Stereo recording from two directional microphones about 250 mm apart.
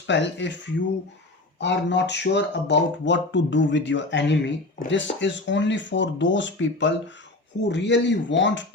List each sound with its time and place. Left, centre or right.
0.1 s speech: left
1.5 s speech: left